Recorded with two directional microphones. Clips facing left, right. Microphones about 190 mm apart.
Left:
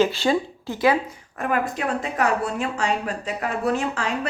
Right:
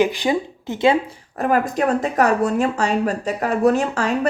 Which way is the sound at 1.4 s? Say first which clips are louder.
Right 6 dB; 35° right (ahead or behind).